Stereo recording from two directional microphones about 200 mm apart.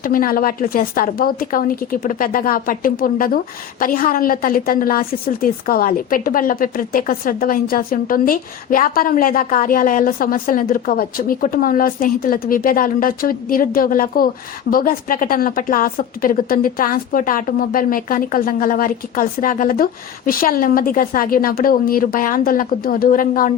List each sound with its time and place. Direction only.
0.0 s a woman's voice: 45° left (ahead or behind)